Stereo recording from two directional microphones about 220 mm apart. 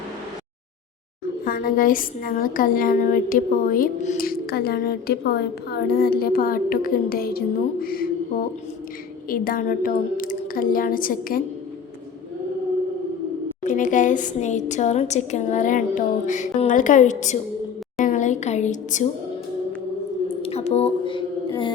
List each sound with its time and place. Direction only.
1.5 s a woman's voice: 40° left (ahead or behind)
9.3 s a woman's voice: 40° left (ahead or behind)
13.7 s a woman's voice: 35° left (ahead or behind)
20.4 s music: 30° left (ahead or behind)